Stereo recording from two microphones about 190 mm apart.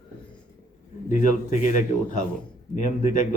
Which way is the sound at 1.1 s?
40° left (ahead or behind).